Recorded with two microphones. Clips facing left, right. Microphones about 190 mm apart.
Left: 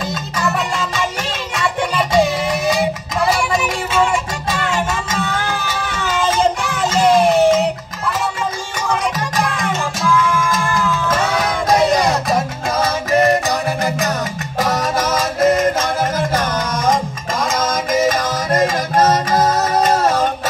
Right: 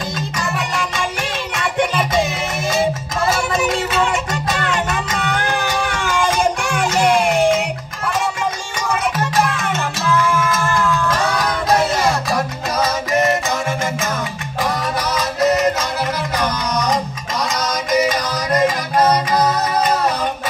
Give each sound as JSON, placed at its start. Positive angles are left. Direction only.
{"t": 2.6, "sound": "music", "side_deg": -25}
{"t": 5.3, "sound": "music", "side_deg": -15}
{"t": 10.8, "sound": "music", "side_deg": 5}
{"t": 13.5, "sound": "music", "side_deg": 35}